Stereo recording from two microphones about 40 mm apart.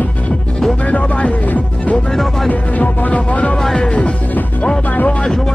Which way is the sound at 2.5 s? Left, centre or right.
Left.